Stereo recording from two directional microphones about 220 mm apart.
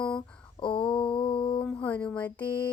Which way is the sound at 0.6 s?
20° left (ahead or behind).